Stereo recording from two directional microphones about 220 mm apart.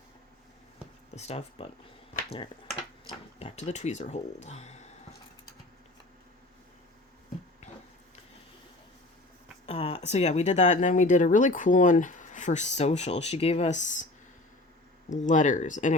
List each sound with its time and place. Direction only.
1.1 s speech: 30° left (ahead or behind)
3.3 s speech: 30° left (ahead or behind)
9.6 s speech: 25° left (ahead or behind)
15.1 s speech: 35° left (ahead or behind)